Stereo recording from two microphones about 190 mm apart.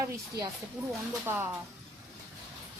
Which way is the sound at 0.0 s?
20° right (ahead or behind).